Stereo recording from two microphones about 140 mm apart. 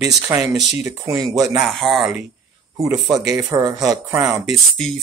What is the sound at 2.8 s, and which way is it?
Speech, 20° right (ahead or behind).